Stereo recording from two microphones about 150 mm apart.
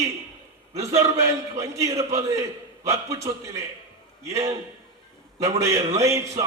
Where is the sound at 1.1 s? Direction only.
20° right (ahead or behind).